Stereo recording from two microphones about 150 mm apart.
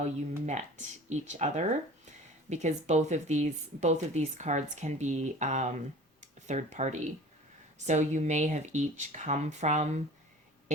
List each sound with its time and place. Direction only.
0.0 s a woman's voice: 50° right (ahead or behind)